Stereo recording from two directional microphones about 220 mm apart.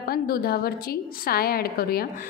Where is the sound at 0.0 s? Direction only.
45° left (ahead or behind).